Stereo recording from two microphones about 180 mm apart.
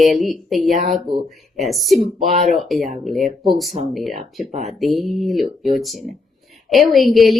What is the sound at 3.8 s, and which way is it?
Speech, 40° right (ahead or behind).